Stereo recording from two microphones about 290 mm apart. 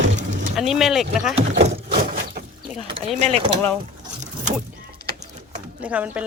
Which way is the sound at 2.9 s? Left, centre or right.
Centre.